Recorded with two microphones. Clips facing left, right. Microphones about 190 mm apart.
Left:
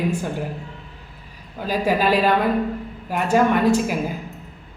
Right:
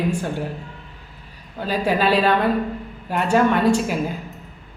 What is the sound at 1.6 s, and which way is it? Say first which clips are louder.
Speech: even; 5° left (ahead or behind).